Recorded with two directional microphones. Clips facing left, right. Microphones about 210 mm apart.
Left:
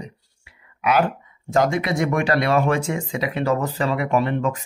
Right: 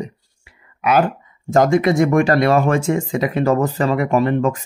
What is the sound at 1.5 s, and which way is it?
Speech, 45° right (ahead or behind).